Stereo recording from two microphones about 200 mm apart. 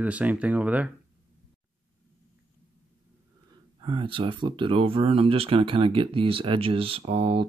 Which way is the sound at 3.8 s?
25° right (ahead or behind).